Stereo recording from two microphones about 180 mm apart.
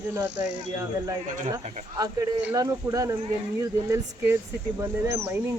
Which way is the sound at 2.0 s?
20° right (ahead or behind).